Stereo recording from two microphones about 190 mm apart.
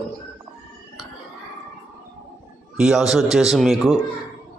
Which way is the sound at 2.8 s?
Centre (ahead or behind).